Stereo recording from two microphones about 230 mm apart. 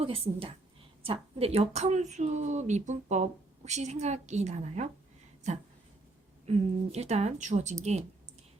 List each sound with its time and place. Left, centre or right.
0.0 s a woman's voice: right
6.4 s a woman's voice: right